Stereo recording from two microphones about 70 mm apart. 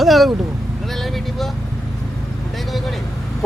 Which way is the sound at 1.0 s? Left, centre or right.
Centre.